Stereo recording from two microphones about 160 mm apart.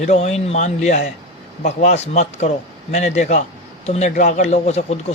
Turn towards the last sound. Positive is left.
turn(degrees=45)  # may be behind; listen again after turning